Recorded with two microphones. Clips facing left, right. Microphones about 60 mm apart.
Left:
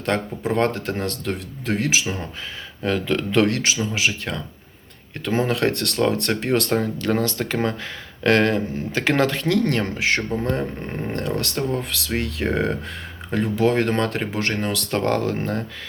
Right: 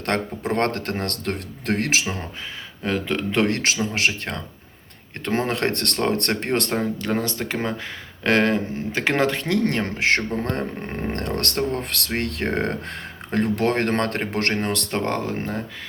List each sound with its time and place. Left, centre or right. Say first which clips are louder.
0.0 s speech: left 1 dB; right
2.8 s speech: left 2 dB; right
3.9 s speech: even; right
6.7 s speech: left 2 dB; right
10.0 s speech: right 1 dB; right
14.5 s speech: right 1 dB; right
14.8 s speech: left 3 dB; right